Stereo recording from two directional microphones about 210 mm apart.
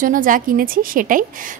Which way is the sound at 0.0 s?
40° right (ahead or behind).